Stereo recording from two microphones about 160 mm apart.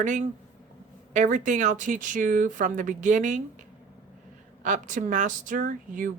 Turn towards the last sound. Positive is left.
turn(degrees=-55)  # may be behind; listen again after turning